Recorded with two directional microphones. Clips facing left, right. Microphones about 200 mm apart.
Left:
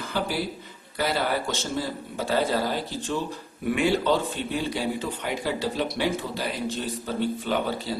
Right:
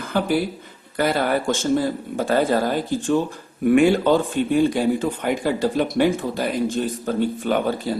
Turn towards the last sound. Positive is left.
turn(degrees=-50)  # may be behind; listen again after turning